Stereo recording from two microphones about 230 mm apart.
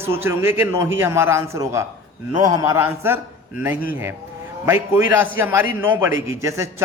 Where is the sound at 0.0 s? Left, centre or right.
Centre.